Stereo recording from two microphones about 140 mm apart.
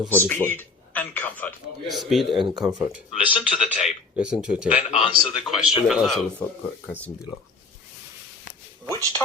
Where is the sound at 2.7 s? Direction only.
30° right (ahead or behind).